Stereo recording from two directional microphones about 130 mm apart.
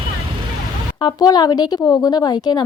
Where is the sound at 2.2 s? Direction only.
30° left (ahead or behind).